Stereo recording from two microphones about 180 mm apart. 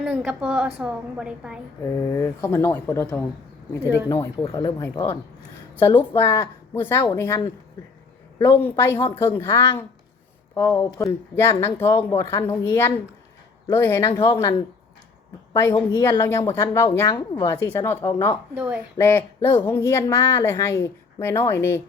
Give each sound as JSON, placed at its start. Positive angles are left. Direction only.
{"t": 0.0, "sound": "a woman's voice", "side_deg": -5}
{"t": 1.8, "sound": "a woman's voice", "side_deg": 15}
{"t": 15.5, "sound": "a woman's voice", "side_deg": 20}
{"t": 18.5, "sound": "speech", "side_deg": -5}
{"t": 18.9, "sound": "a woman's voice", "side_deg": 15}